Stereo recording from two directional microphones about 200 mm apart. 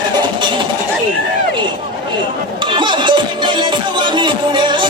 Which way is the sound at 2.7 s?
25° right (ahead or behind).